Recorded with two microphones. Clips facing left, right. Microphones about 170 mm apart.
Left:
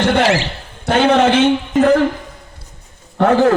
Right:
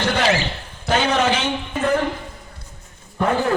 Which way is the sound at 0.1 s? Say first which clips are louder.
Left 5 dB; 65° left (ahead or behind).